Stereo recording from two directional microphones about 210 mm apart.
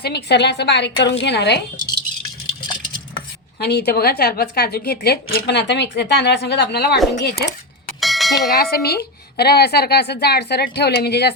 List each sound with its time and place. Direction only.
0.0 s a woman's voice: 50° left (ahead or behind)
3.6 s a woman's voice: 50° left (ahead or behind)
8.0 s bell: centre (ahead or behind)
8.5 s a woman's voice: 50° left (ahead or behind)